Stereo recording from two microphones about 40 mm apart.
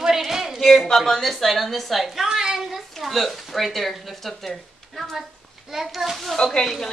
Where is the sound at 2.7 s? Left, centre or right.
Centre.